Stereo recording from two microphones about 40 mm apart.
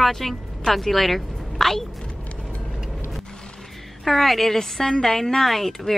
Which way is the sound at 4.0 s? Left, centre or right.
Centre.